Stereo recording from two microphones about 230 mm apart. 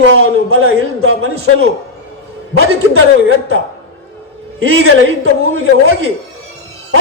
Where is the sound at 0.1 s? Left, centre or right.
Right.